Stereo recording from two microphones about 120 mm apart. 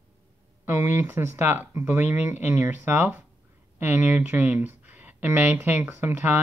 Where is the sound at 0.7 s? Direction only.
25° right (ahead or behind).